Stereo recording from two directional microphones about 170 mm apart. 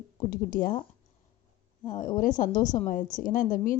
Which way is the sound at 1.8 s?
50° left (ahead or behind).